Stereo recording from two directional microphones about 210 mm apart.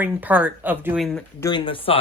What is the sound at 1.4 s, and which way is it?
Speech, 20° left (ahead or behind).